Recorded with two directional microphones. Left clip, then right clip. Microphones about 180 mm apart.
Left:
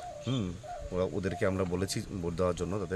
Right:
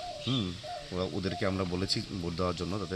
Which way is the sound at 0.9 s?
15° left (ahead or behind).